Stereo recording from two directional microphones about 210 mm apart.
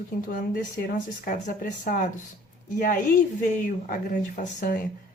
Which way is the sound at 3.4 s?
40° left (ahead or behind).